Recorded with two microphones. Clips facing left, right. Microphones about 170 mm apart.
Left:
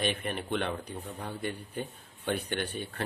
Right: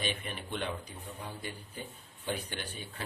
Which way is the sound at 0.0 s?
55° left (ahead or behind).